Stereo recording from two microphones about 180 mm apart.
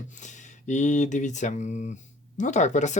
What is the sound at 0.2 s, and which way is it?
Speech, 40° left (ahead or behind).